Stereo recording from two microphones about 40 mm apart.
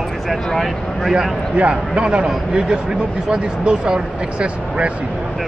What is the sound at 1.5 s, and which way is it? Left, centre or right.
Speech, right.